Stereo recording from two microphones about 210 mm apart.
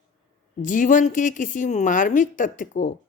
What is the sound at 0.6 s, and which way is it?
Speech, 40° left (ahead or behind).